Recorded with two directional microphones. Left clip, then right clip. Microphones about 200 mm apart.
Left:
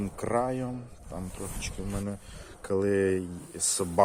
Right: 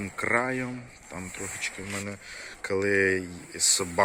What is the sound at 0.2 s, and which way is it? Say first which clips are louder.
Speech: right 3 dB; centre (ahead or behind).